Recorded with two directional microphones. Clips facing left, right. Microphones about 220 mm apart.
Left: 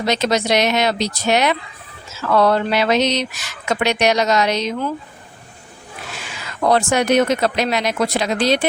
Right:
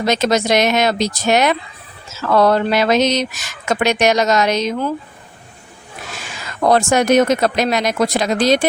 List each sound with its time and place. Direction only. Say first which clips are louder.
0.0 s speech: right 2 dB; 45° right (ahead or behind)
6.2 s speech: right 2 dB; 45° right (ahead or behind)